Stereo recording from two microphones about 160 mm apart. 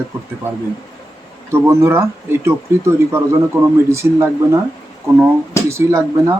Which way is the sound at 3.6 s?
15° right (ahead or behind).